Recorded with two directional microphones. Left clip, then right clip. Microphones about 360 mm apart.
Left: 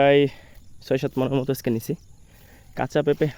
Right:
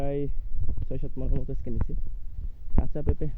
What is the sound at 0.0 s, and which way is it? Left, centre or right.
Speech, centre.